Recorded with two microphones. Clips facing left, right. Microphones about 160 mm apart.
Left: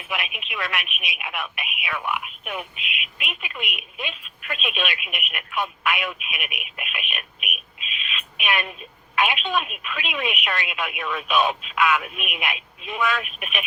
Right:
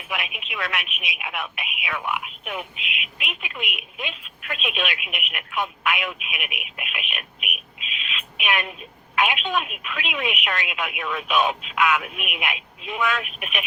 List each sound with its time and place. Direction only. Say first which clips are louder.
0.1 s speech: even; 20° right (ahead or behind)
2.7 s speech: even; 90° right
3.2 s speech: even; 20° right (ahead or behind)
7.8 s bird: even; 90° right
8.4 s speech: even; 20° right (ahead or behind)